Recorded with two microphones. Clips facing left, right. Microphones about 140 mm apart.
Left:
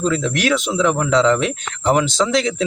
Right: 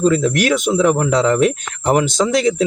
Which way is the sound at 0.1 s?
45° right (ahead or behind).